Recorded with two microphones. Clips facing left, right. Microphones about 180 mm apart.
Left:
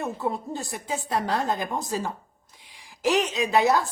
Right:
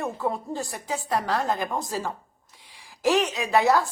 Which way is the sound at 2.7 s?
20° left (ahead or behind).